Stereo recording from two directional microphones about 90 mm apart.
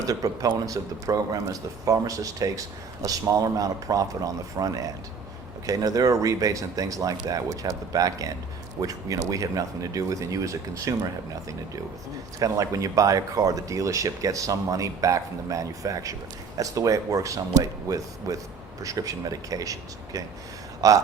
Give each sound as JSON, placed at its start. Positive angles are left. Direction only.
{"t": 0.0, "sound": "speech", "side_deg": -40}
{"t": 12.4, "sound": "speech", "side_deg": -40}